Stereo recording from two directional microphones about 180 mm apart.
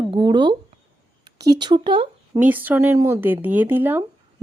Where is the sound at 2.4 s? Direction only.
10° right (ahead or behind).